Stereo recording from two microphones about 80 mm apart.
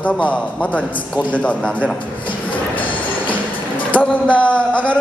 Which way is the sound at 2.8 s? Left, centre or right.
Left.